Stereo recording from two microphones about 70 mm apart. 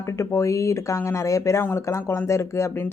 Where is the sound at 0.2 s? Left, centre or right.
Left.